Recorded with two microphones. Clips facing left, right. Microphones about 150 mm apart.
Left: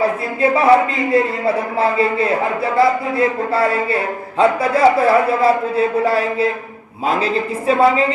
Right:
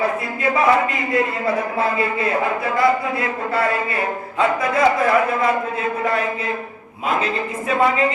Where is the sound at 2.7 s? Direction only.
30° left (ahead or behind).